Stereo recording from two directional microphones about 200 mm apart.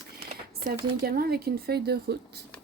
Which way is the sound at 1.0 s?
50° right (ahead or behind).